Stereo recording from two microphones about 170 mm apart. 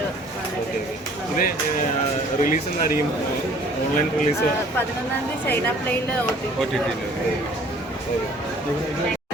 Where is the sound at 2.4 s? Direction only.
55° left (ahead or behind).